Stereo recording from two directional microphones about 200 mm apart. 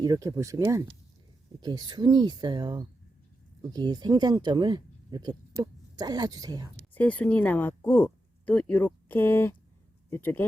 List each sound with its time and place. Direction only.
0.0 s speech: 20° right (ahead or behind)
6.9 s speech: 5° left (ahead or behind)